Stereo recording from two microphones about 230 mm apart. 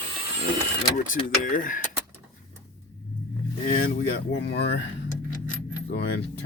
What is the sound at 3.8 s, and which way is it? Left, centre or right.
Speech, left.